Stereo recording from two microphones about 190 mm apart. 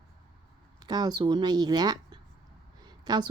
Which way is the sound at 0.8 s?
20° right (ahead or behind).